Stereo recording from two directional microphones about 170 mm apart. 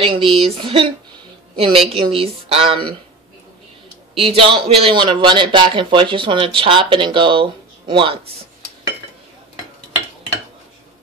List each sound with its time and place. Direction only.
0.0 s speech: 35° right (ahead or behind)
2.0 s speech: 35° right (ahead or behind)
4.2 s a man's voice: 35° right (ahead or behind)